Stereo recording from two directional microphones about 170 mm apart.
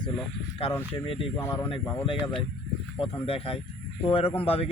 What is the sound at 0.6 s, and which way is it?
Speech, 35° left (ahead or behind).